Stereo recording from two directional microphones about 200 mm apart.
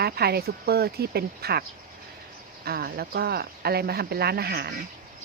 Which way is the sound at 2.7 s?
50° right (ahead or behind).